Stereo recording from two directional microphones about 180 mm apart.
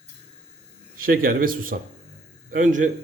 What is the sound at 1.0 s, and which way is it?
Speech, 55° right (ahead or behind).